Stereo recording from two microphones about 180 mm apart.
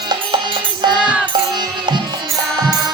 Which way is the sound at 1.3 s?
25° right (ahead or behind).